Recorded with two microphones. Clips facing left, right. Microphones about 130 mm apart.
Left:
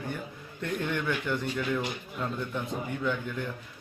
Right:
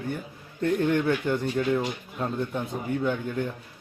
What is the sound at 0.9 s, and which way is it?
A man's voice, 40° right (ahead or behind).